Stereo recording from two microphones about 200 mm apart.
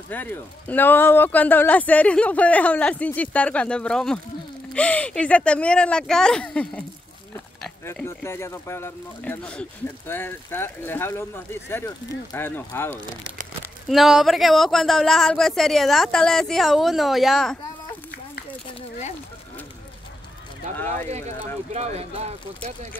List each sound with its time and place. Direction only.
0.1 s speech: 10° left (ahead or behind)
7.8 s speech: 10° left (ahead or behind)
13.8 s speech: centre (ahead or behind)
18.8 s a sound: 35° left (ahead or behind)
21.7 s speech: 30° right (ahead or behind)